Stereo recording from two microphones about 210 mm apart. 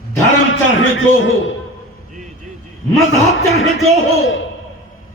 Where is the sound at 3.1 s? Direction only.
70° left (ahead or behind).